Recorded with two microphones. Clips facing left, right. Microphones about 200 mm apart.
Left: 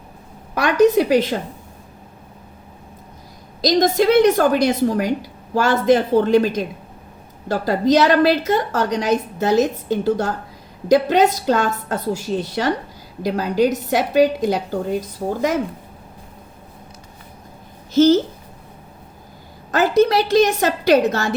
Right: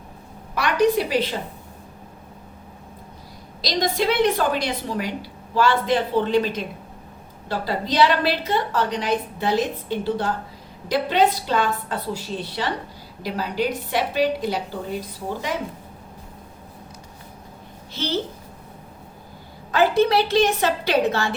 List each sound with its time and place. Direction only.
0.5 s a woman's voice: 45° left (ahead or behind)
3.6 s a woman's voice: 45° left (ahead or behind)
17.9 s a child's voice: 45° left (ahead or behind)
19.7 s a woman's voice: 40° left (ahead or behind)